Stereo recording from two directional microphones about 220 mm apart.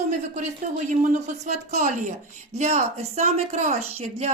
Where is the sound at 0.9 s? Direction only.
35° right (ahead or behind).